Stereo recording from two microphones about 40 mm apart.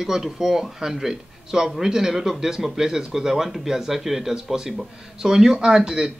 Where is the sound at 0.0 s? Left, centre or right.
Centre.